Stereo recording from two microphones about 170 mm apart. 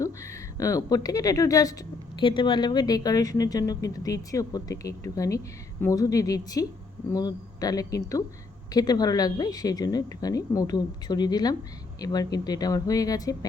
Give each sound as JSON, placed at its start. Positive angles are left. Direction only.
{"t": 0.0, "sound": "a woman's voice", "side_deg": 20}